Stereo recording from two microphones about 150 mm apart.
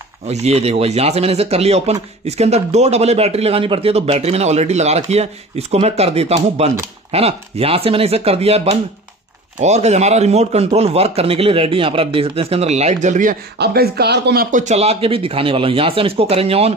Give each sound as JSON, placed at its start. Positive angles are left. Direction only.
{"t": 0.3, "sound": "speech", "side_deg": -45}
{"t": 14.6, "sound": "speech", "side_deg": -50}